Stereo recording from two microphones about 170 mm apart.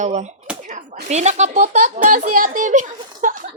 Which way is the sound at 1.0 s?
40° right (ahead or behind).